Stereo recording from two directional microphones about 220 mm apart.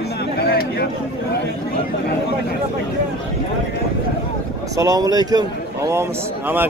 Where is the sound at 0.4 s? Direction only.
45° left (ahead or behind).